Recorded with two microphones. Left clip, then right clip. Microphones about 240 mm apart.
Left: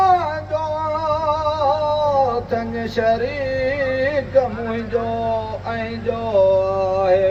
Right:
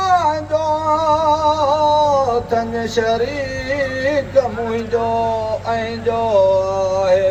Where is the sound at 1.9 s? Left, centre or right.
Right.